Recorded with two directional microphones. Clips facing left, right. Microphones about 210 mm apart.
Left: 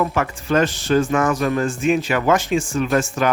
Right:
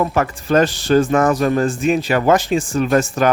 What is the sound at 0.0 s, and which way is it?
A man's voice, 40° right (ahead or behind).